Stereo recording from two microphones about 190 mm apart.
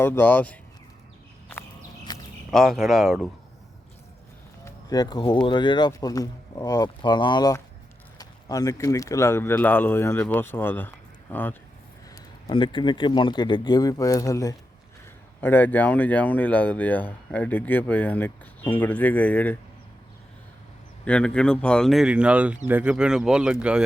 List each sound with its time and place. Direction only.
0.0 s speech: 10° left (ahead or behind)
1.5 s a sound: 10° left (ahead or behind)
2.1 s a sound: 20° left (ahead or behind)
2.5 s speech: centre (ahead or behind)
4.6 s speech: 20° left (ahead or behind)
12.1 s speech: 25° left (ahead or behind)
21.0 s speech: 5° left (ahead or behind)